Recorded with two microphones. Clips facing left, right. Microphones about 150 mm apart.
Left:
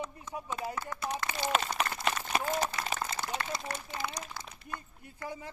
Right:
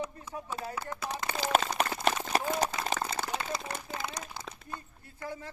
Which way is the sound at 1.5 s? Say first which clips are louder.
Right 5 dB; 35° right (ahead or behind).